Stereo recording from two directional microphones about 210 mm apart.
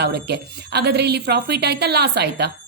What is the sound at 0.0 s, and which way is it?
Speech, 50° right (ahead or behind).